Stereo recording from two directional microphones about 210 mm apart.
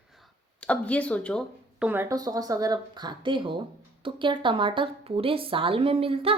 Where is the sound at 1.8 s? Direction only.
10° right (ahead or behind).